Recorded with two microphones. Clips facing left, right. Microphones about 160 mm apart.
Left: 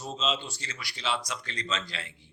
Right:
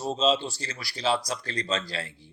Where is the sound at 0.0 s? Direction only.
35° right (ahead or behind).